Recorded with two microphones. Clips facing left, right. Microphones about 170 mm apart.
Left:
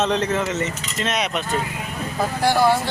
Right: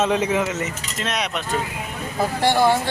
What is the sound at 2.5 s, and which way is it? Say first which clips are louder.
Speech: even; 20° right (ahead or behind).